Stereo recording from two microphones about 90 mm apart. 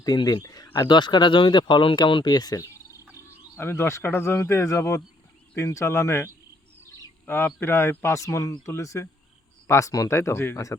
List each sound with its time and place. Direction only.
0.3 s speech: 45° left (ahead or behind)
3.2 s speech: 30° left (ahead or behind)